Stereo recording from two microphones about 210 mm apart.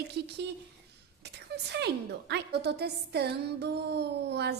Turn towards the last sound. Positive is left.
turn(degrees=-50)  # may be behind; listen again after turning